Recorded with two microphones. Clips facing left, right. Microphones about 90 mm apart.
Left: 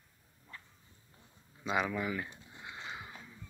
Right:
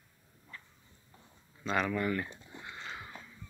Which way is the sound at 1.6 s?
10° left (ahead or behind).